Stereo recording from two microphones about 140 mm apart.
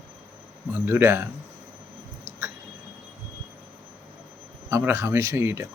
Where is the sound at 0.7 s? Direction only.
15° right (ahead or behind).